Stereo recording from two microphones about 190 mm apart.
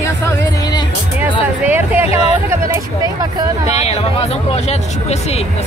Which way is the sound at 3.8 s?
35° left (ahead or behind).